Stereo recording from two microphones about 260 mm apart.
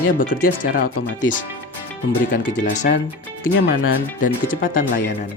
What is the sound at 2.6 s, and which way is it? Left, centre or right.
Speech, left.